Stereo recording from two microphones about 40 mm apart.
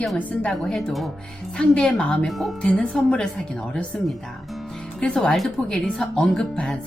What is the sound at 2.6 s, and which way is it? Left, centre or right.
Speech, left.